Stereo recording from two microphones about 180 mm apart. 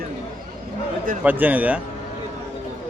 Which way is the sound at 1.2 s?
10° right (ahead or behind).